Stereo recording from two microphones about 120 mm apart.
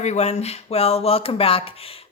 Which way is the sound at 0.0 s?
65° left (ahead or behind).